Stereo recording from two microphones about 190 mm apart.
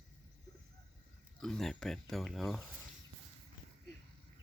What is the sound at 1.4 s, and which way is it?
Speech, centre (ahead or behind).